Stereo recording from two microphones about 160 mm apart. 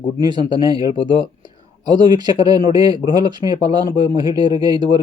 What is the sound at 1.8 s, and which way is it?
Speech, 25° right (ahead or behind).